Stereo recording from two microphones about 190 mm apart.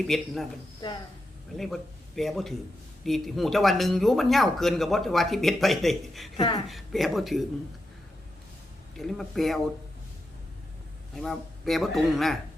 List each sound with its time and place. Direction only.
0.1 s speech: centre (ahead or behind)
1.5 s speech: centre (ahead or behind)
6.3 s speech: 20° left (ahead or behind)
6.7 s speech: centre (ahead or behind)
9.0 s speech: centre (ahead or behind)
11.1 s speech: centre (ahead or behind)